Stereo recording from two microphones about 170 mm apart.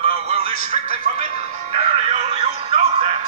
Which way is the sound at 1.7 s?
35° right (ahead or behind).